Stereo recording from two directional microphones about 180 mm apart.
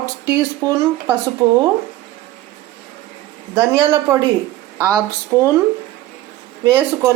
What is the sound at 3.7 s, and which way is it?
Speech, 15° right (ahead or behind).